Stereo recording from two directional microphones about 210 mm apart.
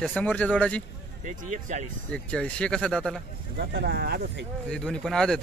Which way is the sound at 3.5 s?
50° right (ahead or behind).